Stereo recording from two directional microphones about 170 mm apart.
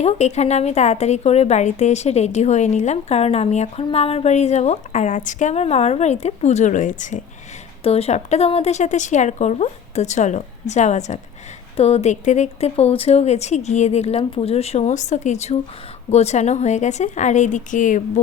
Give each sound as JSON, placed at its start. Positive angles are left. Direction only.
{"t": 0.0, "sound": "a woman's voice", "side_deg": 40}
{"t": 7.9, "sound": "a woman's voice", "side_deg": 35}